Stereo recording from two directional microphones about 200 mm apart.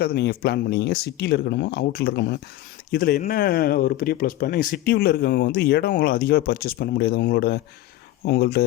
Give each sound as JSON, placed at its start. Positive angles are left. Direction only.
{"t": 0.0, "sound": "speech", "side_deg": 50}